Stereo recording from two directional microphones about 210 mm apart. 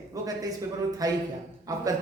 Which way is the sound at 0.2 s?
15° right (ahead or behind).